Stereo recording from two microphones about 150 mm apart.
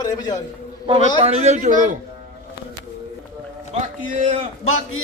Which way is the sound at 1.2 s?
45° right (ahead or behind).